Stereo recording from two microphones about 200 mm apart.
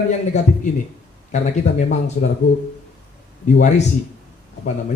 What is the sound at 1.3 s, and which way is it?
Speech, 35° left (ahead or behind).